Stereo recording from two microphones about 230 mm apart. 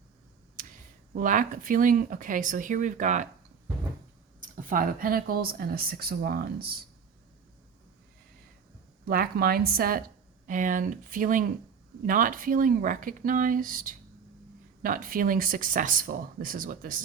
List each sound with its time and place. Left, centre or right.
0.6 s a sound: right
1.1 s speech: right
4.4 s speech: right
9.0 s speech: right